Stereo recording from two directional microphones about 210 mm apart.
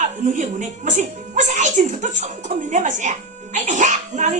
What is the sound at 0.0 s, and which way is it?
Speech, 35° right (ahead or behind).